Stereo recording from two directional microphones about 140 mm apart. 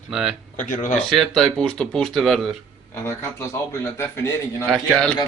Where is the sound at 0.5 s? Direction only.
65° left (ahead or behind).